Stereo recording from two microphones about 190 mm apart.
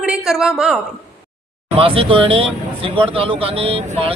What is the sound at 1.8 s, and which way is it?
A man's voice, 30° right (ahead or behind).